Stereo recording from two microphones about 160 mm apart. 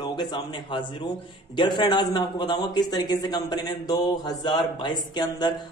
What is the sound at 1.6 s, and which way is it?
Speech, 30° left (ahead or behind).